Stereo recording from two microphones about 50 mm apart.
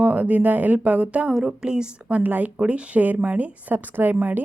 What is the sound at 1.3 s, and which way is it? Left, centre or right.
Speech, centre.